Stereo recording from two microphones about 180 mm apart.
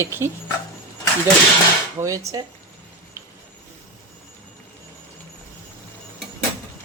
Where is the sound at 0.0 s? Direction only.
15° right (ahead or behind).